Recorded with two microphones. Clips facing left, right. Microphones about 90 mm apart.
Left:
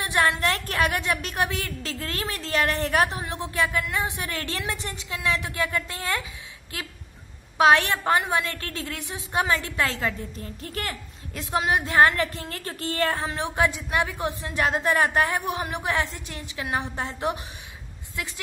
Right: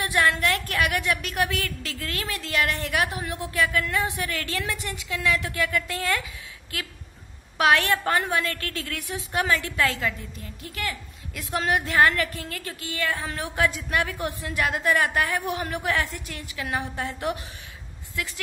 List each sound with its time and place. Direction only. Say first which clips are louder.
0.0 s a woman's voice: even; 25° left (ahead or behind); by 11.0 s 40° left (ahead or behind)
11.3 s a woman's voice: left 1 dB; 20° left (ahead or behind)
13.3 s a woman's voice: left 1 dB; 20° left (ahead or behind)